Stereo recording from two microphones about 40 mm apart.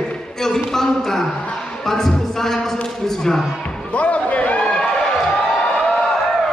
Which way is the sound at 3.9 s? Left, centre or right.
Left.